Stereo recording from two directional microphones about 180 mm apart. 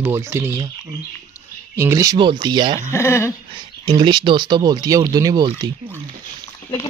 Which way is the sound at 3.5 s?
25° right (ahead or behind).